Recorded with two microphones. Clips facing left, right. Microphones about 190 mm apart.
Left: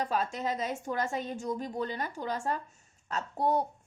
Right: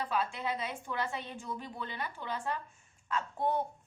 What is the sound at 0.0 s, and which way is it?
A woman's voice, 40° left (ahead or behind).